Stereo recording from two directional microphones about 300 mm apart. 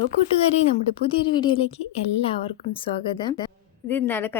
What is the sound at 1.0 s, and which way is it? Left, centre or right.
A woman's voice, centre.